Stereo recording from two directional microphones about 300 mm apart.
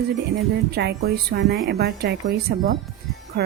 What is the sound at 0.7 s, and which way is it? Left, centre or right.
A woman's voice, right.